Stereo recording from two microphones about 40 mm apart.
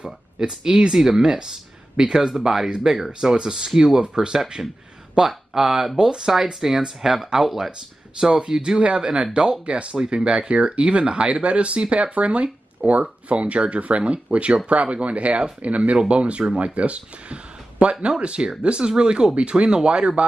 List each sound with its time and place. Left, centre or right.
0.0 s speech: centre
8.2 s speech: centre